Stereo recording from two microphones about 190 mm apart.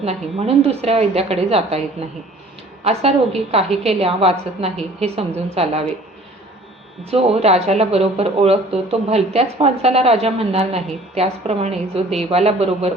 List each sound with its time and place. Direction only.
0.0 s speech: 30° right (ahead or behind)
2.8 s speech: 30° right (ahead or behind)
7.0 s speech: 30° right (ahead or behind)